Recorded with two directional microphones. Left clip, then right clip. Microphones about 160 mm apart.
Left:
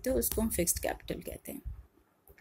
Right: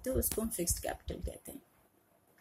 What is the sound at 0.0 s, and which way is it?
Speech, 45° left (ahead or behind).